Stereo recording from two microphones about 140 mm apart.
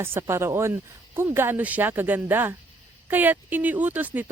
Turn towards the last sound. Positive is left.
turn(degrees=-10)  # may be behind; listen again after turning